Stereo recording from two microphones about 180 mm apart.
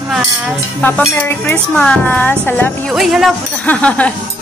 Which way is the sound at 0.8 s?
10° left (ahead or behind).